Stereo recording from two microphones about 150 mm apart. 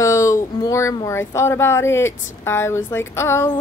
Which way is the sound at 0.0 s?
20° left (ahead or behind).